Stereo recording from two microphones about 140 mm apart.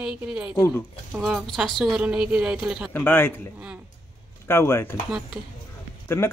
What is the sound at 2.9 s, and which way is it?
Speech, 15° left (ahead or behind).